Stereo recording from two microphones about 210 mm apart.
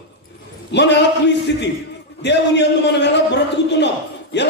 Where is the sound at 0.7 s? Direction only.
55° left (ahead or behind).